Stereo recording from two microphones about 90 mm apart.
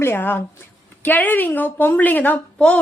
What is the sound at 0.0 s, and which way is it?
Speech, 25° left (ahead or behind).